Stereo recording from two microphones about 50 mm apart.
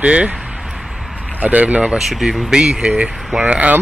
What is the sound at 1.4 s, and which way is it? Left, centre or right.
Speech, right.